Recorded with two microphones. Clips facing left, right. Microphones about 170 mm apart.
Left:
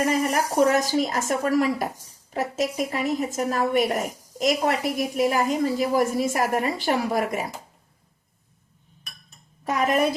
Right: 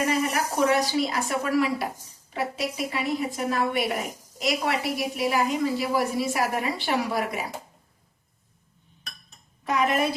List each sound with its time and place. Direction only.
0.0 s a woman's voice: 45° left (ahead or behind)
9.6 s a woman's voice: 45° left (ahead or behind)